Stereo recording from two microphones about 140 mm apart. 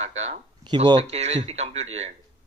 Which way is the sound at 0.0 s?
50° right (ahead or behind).